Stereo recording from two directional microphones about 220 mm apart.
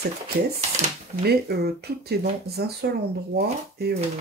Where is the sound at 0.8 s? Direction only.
30° right (ahead or behind).